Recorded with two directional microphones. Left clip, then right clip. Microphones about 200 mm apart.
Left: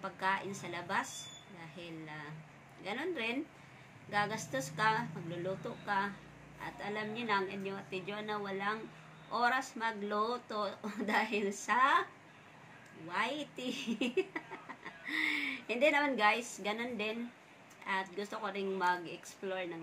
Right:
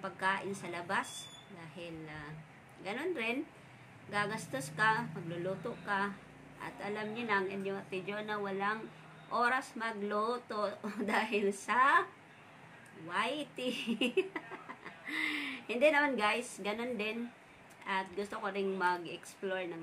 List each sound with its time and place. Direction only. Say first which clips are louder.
0.0 s a woman's voice: right 1 dB; 5° right (ahead or behind)
13.1 s a woman's voice: right 1 dB; 5° right (ahead or behind)